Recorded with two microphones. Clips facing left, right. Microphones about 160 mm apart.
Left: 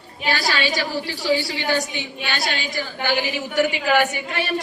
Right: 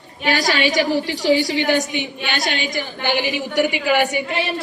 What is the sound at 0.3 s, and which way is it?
A woman's voice, 15° right (ahead or behind).